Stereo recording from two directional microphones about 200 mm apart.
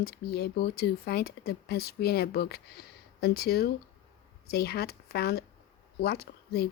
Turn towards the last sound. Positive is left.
turn(degrees=55)  # may be behind; listen again after turning